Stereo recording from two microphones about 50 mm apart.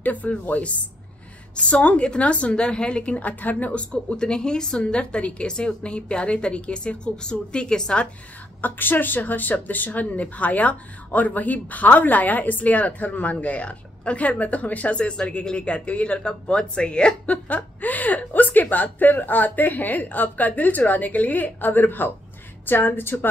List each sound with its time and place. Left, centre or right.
0.0 s a woman's voice: left
8.5 s a woman's voice: left; by 17.1 s centre
17.3 s a woman's voice: left